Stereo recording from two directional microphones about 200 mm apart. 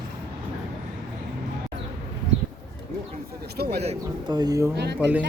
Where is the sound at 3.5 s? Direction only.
50° right (ahead or behind).